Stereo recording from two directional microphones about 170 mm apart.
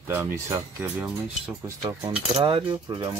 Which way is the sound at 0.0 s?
15° right (ahead or behind).